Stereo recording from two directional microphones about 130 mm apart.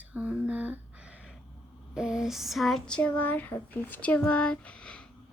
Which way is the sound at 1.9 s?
5° right (ahead or behind).